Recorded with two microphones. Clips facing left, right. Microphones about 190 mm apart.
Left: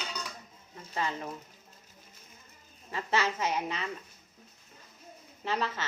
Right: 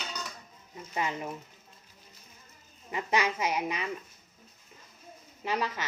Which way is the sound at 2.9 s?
15° right (ahead or behind).